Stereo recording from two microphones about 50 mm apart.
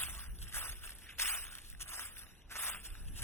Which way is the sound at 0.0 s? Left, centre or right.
Left.